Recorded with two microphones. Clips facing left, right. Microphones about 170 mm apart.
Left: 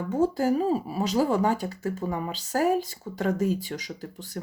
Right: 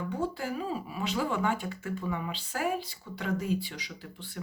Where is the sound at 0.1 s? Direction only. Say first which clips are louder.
Left 13 dB; 40° left (ahead or behind).